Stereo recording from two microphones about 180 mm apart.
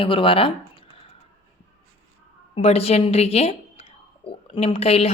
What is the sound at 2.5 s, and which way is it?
A woman's voice, 35° left (ahead or behind).